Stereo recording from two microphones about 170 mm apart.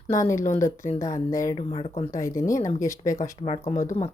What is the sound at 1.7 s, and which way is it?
Speech, 35° left (ahead or behind).